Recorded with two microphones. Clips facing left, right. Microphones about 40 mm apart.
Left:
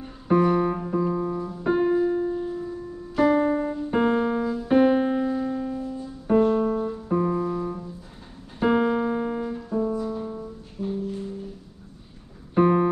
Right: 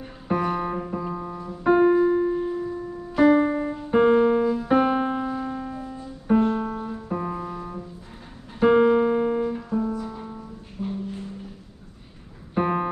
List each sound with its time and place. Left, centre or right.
0.3 s music: centre
2.0 s piano: right
3.2 s music: centre
3.9 s piano: centre; by 6.0 s right
6.2 s music: centre
12.5 s music: centre